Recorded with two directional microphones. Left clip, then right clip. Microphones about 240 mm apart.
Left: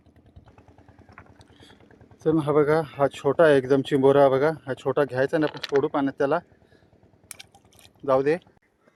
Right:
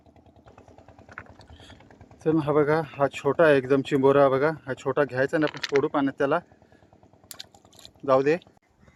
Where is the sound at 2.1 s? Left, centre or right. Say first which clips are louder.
Left 1 dB; centre.